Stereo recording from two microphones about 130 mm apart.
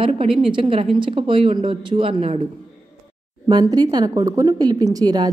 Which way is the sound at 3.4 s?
30° right (ahead or behind).